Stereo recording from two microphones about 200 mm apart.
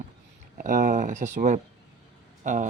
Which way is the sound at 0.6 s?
40° right (ahead or behind).